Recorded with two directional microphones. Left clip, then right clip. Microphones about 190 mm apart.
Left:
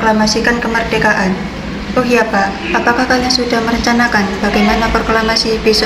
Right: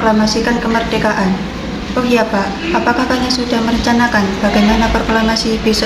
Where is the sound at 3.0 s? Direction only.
15° left (ahead or behind).